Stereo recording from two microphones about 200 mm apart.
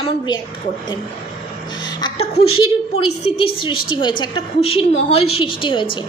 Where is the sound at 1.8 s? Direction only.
20° left (ahead or behind).